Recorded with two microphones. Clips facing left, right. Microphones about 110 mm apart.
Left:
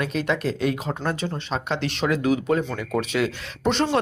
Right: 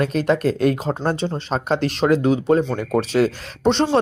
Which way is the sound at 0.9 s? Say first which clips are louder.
Right 5 dB; 30° right (ahead or behind).